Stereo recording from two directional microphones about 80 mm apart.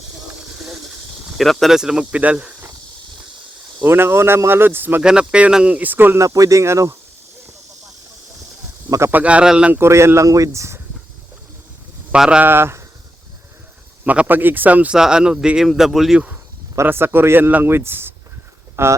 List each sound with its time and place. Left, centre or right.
1.3 s speech: centre
1.8 s speech: centre
3.8 s a man's voice: right
5.3 s a man's voice: centre; by 6.2 s right
6.2 s speech: right
9.0 s speech: centre
9.7 s speech: right
12.1 s speech: centre
12.4 s a man's voice: right
14.0 s a man's voice: centre
16.8 s a man's voice: right